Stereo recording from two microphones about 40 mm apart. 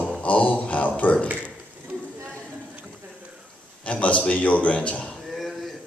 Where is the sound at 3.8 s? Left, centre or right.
Left.